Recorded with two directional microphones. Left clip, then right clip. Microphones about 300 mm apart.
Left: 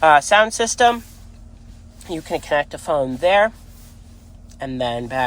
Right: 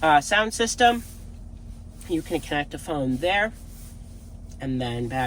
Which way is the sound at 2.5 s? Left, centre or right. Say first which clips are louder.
Left 8 dB; centre.